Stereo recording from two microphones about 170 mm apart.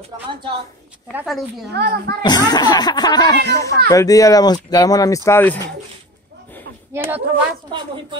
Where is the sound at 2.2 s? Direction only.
25° left (ahead or behind).